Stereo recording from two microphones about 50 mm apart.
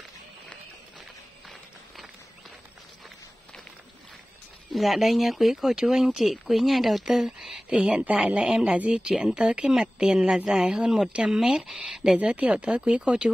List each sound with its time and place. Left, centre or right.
4.7 s speech: centre
7.7 s speech: right
8.5 s a woman's voice: centre
11.8 s a sound: centre
12.2 s speech: right